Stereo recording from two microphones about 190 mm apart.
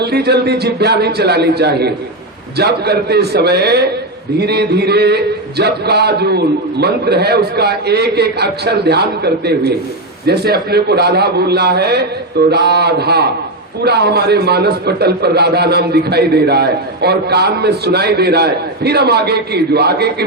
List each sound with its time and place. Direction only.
0.0 s a man's voice: 60° right (ahead or behind)